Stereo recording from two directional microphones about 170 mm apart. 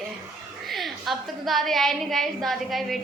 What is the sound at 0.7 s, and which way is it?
A woman's voice, centre (ahead or behind).